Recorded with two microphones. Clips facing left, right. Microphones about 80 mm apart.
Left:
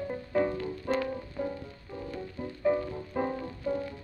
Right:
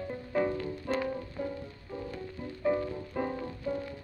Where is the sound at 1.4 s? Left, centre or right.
Left.